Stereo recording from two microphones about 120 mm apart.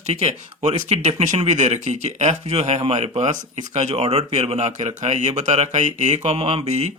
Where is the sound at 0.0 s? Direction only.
60° right (ahead or behind).